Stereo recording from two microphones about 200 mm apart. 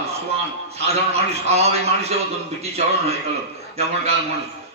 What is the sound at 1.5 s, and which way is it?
Speech, 30° right (ahead or behind).